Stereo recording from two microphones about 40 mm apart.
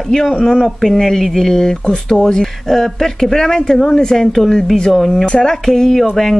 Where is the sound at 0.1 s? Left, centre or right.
Centre.